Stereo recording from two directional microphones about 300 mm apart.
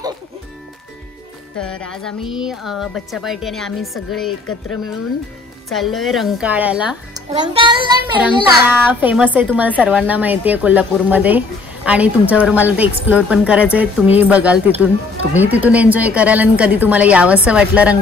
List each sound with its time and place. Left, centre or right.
1.6 s a child's voice: centre
4.3 s speech: left
5.7 s a child's voice: centre
7.3 s child singing: centre
8.2 s a child's voice: centre